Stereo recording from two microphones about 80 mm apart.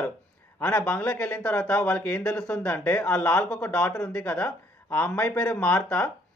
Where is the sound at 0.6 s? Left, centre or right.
Centre.